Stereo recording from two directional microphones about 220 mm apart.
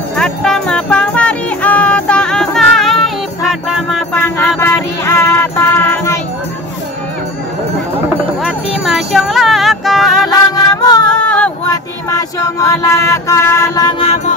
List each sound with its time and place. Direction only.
0.1 s music: 5° left (ahead or behind)
4.6 s music: 10° left (ahead or behind)
8.4 s music: centre (ahead or behind)
10.2 s music: 15° left (ahead or behind)
11.1 s a sound: 5° left (ahead or behind)
12.1 s music: 15° left (ahead or behind)